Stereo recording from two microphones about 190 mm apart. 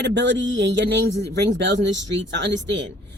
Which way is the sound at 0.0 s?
65° right (ahead or behind).